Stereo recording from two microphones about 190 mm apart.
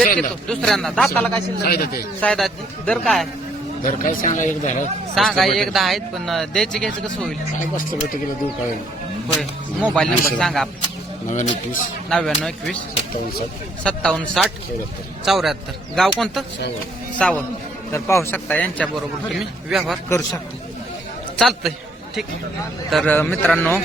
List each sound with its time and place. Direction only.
0.2 s speech: 5° left (ahead or behind)
1.6 s speech: 55° left (ahead or behind)
2.2 s speech: 5° left (ahead or behind)
4.0 s speech: 40° left (ahead or behind)
5.1 s speech: centre (ahead or behind)
9.3 s speech: centre (ahead or behind)
11.3 s speech: 40° left (ahead or behind)
12.0 s speech: centre (ahead or behind)
13.8 s speech: 5° left (ahead or behind)
20.1 s speech: 15° left (ahead or behind)
21.3 s a man's voice: centre (ahead or behind)
22.9 s speech: 5° left (ahead or behind)